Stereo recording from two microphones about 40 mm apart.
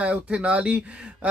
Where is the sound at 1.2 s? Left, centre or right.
Right.